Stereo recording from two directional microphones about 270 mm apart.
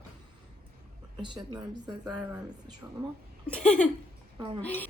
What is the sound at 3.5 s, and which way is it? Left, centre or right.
A woman's voice, centre.